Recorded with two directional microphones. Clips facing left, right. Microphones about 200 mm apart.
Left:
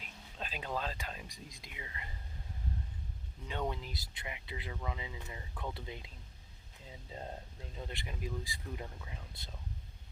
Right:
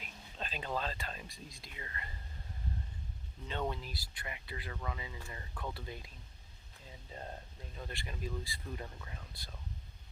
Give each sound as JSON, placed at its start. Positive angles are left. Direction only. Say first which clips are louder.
{"t": 0.0, "sound": "speech", "louder": "even", "side_deg": 5}
{"t": 3.4, "sound": "speech", "louder": "even", "side_deg": 10}
{"t": 7.1, "sound": "speech", "louder": "left 2 dB", "side_deg": 20}
{"t": 9.3, "sound": "speech", "louder": "left 1 dB", "side_deg": 25}